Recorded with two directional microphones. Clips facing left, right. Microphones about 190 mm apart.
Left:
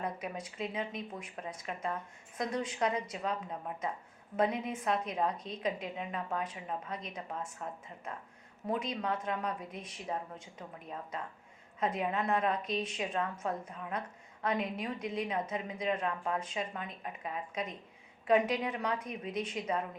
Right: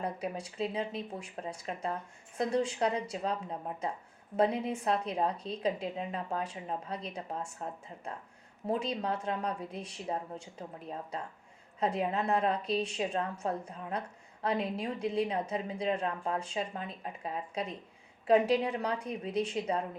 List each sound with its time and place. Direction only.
0.0 s a woman's voice: 30° right (ahead or behind)